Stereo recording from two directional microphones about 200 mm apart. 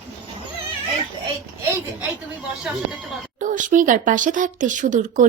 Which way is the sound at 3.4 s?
40° right (ahead or behind).